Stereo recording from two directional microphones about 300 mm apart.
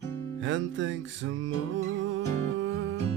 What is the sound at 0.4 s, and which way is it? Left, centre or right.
Music, right.